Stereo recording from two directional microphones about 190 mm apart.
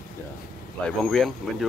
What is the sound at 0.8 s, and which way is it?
Speech, 5° left (ahead or behind).